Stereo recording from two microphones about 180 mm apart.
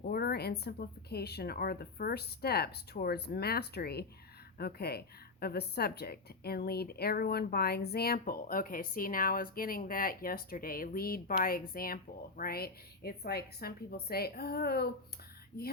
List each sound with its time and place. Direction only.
0.0 s speech: 60° left (ahead or behind)